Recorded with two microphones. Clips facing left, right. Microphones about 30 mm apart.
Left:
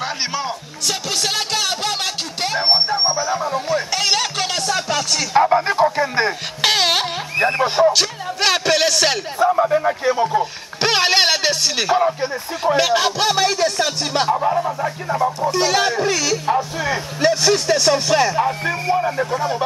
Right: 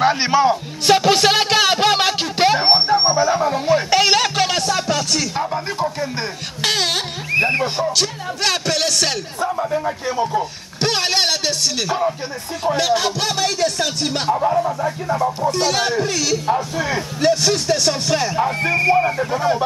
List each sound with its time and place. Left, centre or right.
0.0 s music: centre
0.8 s music: right; by 5.2 s centre
5.4 s a sound: left
5.9 s music: left
6.6 s music: centre
7.9 s speech: centre